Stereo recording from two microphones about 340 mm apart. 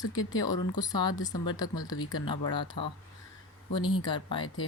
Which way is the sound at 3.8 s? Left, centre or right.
Centre.